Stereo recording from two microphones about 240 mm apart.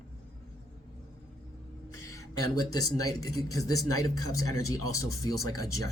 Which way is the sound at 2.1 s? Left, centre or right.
Centre.